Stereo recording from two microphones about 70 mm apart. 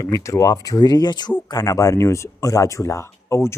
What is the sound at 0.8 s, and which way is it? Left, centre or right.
Speech, left.